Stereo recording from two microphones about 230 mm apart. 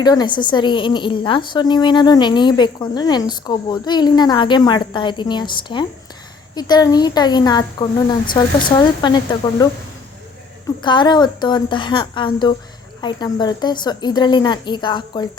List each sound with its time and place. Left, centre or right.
0.0 s a woman's voice: centre
10.8 s a woman's voice: centre